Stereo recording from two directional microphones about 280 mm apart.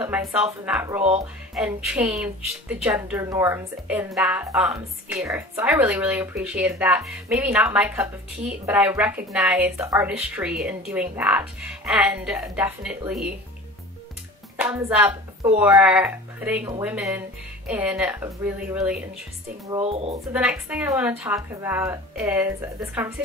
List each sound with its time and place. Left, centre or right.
0.0 s speech: centre
14.6 s speech: centre
19.7 s speech: right
20.3 s speech: centre